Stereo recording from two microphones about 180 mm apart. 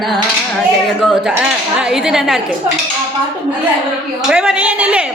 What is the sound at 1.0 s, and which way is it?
A woman's voice, centre (ahead or behind).